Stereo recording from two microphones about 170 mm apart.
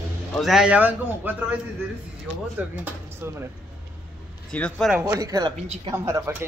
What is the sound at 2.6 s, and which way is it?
Speech, 15° right (ahead or behind).